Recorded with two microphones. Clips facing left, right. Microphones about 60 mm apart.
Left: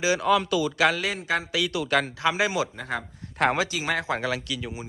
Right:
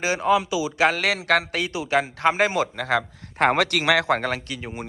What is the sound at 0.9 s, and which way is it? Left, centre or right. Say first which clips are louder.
Speech: right 6 dB; right.